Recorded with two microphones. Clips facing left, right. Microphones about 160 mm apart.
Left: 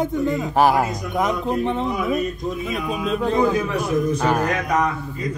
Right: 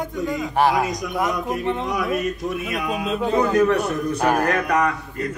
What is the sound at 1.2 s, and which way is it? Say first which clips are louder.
Speech: left 4 dB; 20° left (ahead or behind).